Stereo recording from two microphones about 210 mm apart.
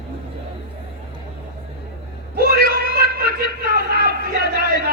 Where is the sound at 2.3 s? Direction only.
45° right (ahead or behind).